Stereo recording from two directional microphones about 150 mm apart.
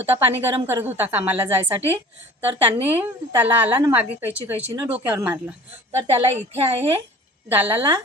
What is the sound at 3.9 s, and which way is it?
Speech, 15° right (ahead or behind).